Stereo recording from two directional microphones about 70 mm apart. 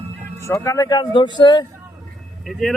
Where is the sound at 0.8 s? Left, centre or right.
Left.